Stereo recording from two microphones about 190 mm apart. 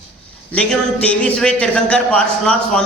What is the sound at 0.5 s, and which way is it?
Speech, 5° left (ahead or behind).